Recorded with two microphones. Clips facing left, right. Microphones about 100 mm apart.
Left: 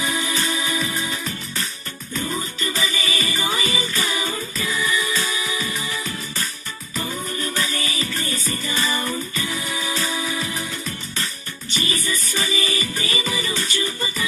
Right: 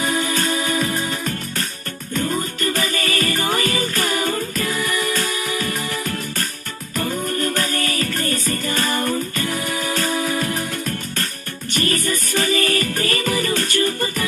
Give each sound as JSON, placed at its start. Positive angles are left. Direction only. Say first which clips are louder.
{"t": 0.0, "sound": "music", "louder": "right 4 dB", "side_deg": -45}